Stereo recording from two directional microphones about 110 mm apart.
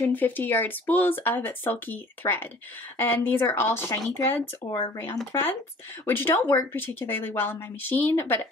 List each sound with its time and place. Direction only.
0.0 s a woman's voice: 15° left (ahead or behind)